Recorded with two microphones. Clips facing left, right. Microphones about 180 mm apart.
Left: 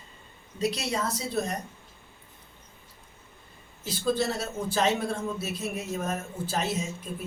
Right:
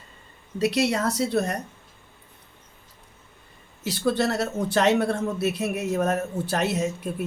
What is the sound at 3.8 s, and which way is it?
A man's voice, 70° right (ahead or behind).